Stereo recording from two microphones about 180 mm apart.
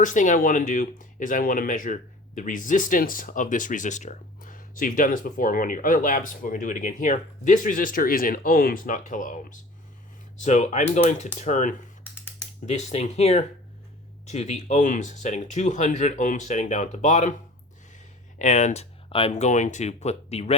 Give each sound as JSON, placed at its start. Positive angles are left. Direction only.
{"t": 0.0, "sound": "speech", "side_deg": 45}
{"t": 18.3, "sound": "speech", "side_deg": 40}